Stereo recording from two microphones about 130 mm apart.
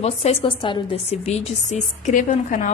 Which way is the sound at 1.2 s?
55° left (ahead or behind).